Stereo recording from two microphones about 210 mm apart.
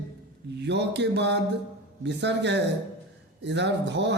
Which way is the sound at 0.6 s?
55° right (ahead or behind).